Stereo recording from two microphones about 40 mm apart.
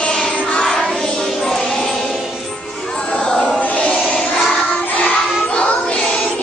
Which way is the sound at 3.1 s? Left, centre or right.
Left.